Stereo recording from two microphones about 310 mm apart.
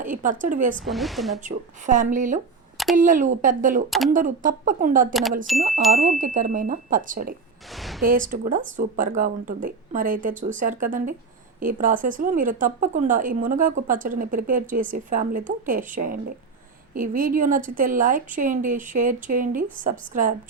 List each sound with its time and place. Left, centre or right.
0.0 s speech: right
0.8 s a woman's voice: centre
1.4 s speech: right
3.8 s a woman's voice: centre
4.1 s speech: right
5.5 s a woman's voice: centre
5.9 s speech: right
7.7 s a sound: centre
8.0 s speech: right